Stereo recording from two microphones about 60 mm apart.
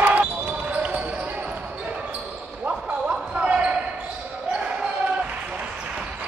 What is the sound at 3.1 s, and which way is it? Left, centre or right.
Basketball bounce, centre.